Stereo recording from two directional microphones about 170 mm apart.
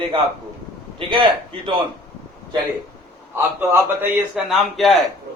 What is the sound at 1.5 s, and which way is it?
Speech, 30° right (ahead or behind).